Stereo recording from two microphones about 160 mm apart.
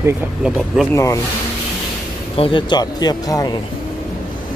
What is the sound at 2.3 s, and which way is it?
Speech, 35° left (ahead or behind).